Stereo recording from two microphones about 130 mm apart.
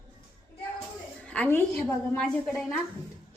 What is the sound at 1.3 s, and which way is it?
Speech, 15° left (ahead or behind).